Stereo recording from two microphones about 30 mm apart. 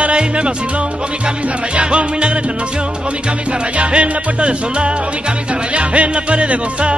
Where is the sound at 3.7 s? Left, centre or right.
Right.